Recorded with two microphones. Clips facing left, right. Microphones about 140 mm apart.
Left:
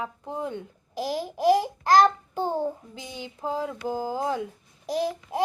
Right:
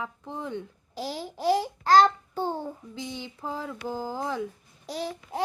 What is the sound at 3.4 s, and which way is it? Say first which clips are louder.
Mantra: left 6 dB; 40° left (ahead or behind).